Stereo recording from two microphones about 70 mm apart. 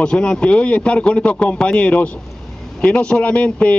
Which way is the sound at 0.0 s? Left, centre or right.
Centre.